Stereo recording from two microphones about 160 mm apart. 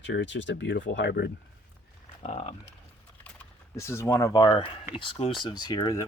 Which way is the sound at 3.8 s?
15° left (ahead or behind).